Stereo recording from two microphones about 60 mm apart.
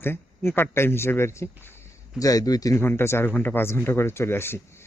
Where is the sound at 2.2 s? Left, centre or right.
Left.